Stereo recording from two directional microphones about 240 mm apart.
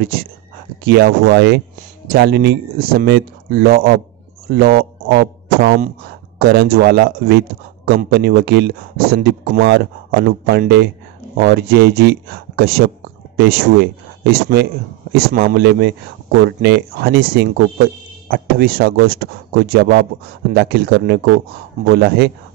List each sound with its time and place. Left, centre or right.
0.0 s speech: right